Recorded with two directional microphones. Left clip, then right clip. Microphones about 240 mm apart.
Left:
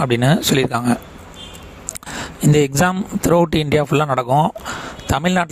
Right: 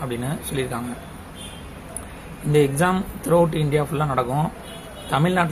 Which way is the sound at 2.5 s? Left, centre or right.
Left.